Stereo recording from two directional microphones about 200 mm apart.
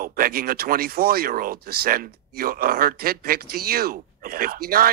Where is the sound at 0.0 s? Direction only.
45° right (ahead or behind).